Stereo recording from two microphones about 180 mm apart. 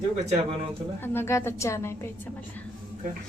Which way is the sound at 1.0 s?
15° left (ahead or behind).